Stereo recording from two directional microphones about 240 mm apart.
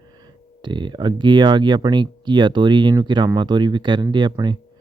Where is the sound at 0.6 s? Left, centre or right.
Centre.